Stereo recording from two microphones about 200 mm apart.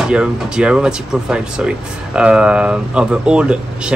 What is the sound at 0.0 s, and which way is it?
Speech, 5° right (ahead or behind).